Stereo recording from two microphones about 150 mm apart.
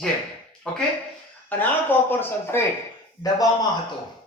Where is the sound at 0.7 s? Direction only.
5° left (ahead or behind); by 3.5 s 25° left (ahead or behind).